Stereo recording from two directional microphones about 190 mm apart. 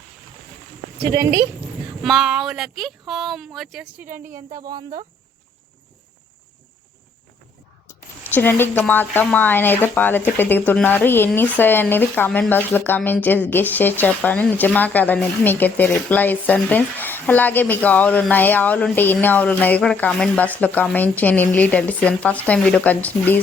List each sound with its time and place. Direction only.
1.1 s speech: 55° right (ahead or behind)
2.0 s speech: centre (ahead or behind)
4.3 s speech: 45° right (ahead or behind)
4.5 s speech: 20° right (ahead or behind)
7.9 s speech: 10° left (ahead or behind)